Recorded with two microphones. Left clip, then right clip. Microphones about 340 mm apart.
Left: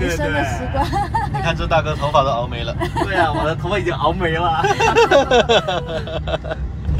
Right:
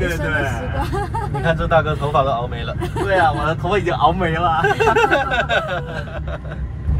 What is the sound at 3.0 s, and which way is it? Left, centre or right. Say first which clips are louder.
Speech: right 3 dB; centre.